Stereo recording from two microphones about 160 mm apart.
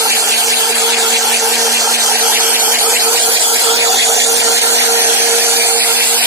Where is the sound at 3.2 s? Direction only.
30° right (ahead or behind).